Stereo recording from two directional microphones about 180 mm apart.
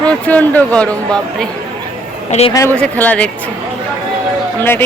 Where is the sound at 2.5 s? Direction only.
20° left (ahead or behind).